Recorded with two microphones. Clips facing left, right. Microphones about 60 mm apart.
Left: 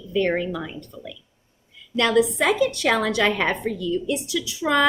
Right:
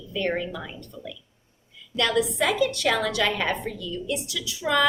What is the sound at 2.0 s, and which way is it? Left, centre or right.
A woman's voice, left.